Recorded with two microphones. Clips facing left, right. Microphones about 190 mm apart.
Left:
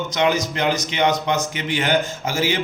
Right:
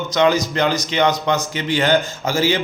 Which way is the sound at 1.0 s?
35° right (ahead or behind).